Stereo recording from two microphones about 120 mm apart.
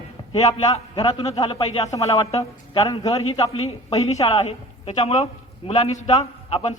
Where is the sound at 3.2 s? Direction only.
55° left (ahead or behind); by 6.1 s 75° left (ahead or behind).